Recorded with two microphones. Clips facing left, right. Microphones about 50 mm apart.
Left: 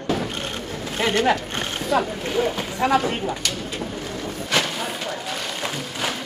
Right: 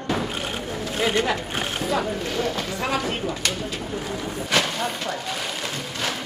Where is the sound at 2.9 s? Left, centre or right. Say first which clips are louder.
Left 6 dB; left.